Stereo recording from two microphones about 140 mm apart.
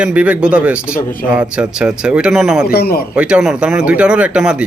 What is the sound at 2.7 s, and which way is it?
Speech, 90° left.